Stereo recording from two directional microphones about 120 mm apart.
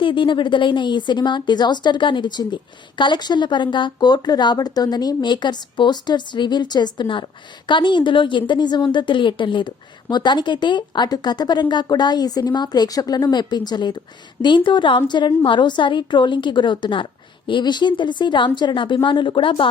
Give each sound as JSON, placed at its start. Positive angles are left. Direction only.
{"t": 0.0, "sound": "a woman's voice", "side_deg": 45}